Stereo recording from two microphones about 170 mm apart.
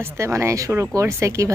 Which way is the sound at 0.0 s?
15° right (ahead or behind).